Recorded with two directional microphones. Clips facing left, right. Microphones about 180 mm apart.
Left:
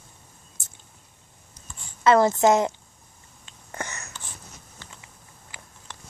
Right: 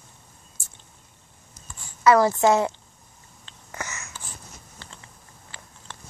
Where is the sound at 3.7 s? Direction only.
35° left (ahead or behind).